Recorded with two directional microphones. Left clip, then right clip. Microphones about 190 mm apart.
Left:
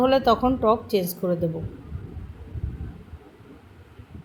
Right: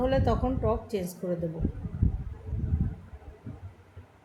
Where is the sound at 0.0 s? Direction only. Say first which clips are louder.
Left 8 dB; 15° left (ahead or behind).